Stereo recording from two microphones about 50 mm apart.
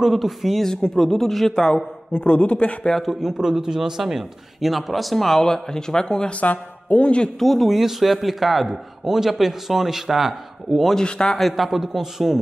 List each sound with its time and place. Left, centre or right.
0.0 s a man's voice: centre
2.1 s speech: left
2.9 s a man's voice: centre
6.4 s speech: left
7.3 s a man's voice: centre
11.0 s speech: centre
11.3 s a man's voice: centre